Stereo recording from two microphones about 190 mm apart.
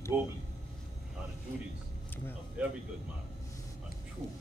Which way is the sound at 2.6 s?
5° right (ahead or behind).